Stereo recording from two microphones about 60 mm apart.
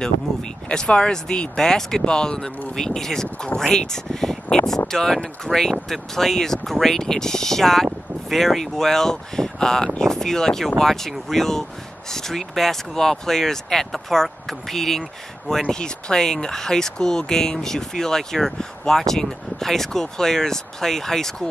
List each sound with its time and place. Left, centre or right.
0.0 s speech: centre